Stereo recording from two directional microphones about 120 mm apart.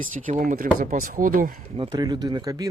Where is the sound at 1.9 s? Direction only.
35° right (ahead or behind).